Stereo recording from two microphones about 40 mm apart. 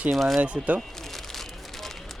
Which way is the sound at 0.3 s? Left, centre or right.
Right.